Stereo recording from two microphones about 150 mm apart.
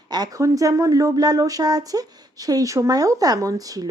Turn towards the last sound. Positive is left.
turn(degrees=-25)  # may be behind; listen again after turning